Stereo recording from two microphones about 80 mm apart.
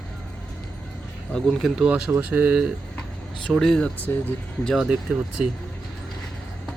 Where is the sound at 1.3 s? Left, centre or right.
Centre.